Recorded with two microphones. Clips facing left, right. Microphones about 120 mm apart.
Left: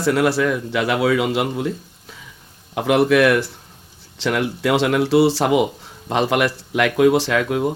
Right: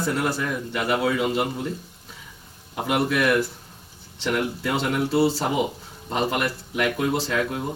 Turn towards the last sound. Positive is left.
turn(degrees=90)